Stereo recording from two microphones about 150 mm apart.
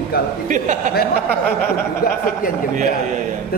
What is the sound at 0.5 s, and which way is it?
Speech, 55° right (ahead or behind).